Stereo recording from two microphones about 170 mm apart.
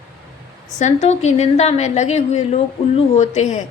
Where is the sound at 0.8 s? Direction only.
45° left (ahead or behind).